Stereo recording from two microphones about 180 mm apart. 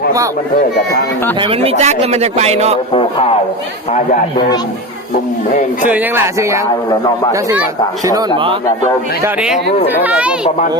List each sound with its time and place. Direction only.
1.4 s a man's voice: 30° right (ahead or behind)
2.9 s speech: 35° left (ahead or behind)
5.9 s speech: 10° right (ahead or behind)
9.2 s speech: 5° right (ahead or behind)